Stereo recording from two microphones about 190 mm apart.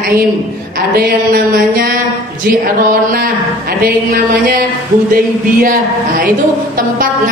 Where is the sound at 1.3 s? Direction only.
50° right (ahead or behind).